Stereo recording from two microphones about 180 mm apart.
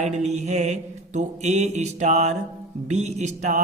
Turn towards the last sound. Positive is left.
turn(degrees=-40)  # may be behind; listen again after turning